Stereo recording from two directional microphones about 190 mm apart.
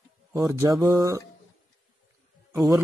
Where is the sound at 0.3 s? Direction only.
15° right (ahead or behind).